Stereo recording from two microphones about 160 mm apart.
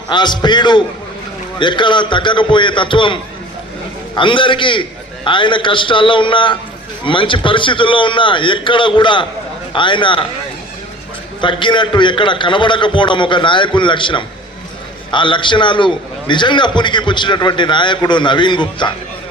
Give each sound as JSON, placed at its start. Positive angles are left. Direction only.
{"t": 0.1, "sound": "a man's voice", "side_deg": 30}
{"t": 11.3, "sound": "a man's voice", "side_deg": 30}